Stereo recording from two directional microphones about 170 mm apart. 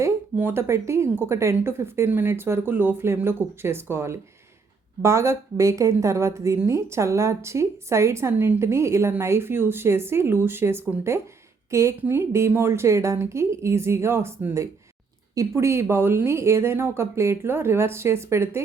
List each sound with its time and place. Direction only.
0.0 s a woman's voice: 15° right (ahead or behind)